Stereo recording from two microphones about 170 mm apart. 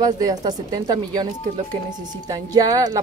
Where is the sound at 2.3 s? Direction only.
20° right (ahead or behind).